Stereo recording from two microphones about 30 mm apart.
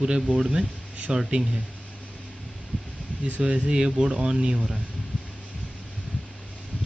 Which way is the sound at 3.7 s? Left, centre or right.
Right.